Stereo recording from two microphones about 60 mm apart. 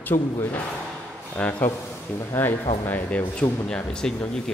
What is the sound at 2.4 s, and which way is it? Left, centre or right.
Speech, left.